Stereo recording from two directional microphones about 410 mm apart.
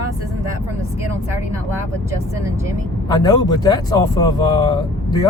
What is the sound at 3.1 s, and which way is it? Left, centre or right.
Speech, centre.